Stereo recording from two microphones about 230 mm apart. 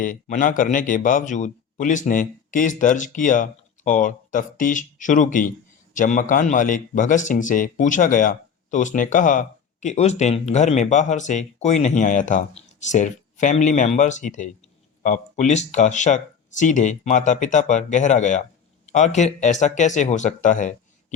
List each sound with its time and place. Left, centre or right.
0.0 s a man's voice: left